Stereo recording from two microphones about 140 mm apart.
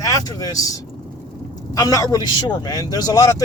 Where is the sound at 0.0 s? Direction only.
25° left (ahead or behind).